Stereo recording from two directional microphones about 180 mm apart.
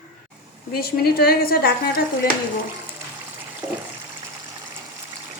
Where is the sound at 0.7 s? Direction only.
60° left (ahead or behind).